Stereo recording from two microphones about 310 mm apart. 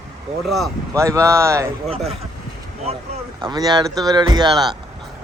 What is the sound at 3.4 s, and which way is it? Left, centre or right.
Speech, centre.